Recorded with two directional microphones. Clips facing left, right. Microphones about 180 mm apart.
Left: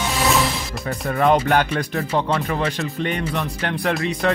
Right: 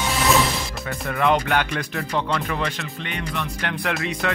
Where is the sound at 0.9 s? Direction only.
40° left (ahead or behind).